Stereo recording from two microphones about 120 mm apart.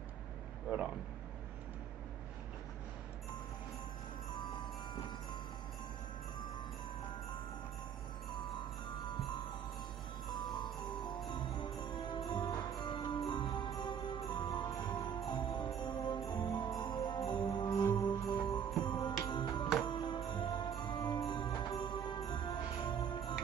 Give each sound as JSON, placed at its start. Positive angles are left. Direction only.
{"t": 10.3, "sound": "mallet percussion", "side_deg": 40}
{"t": 11.2, "sound": "music", "side_deg": 40}
{"t": 14.7, "sound": "jingle bell", "side_deg": 35}
{"t": 16.3, "sound": "music", "side_deg": 35}
{"t": 17.9, "sound": "jingle bell", "side_deg": 35}
{"t": 18.8, "sound": "music", "side_deg": 40}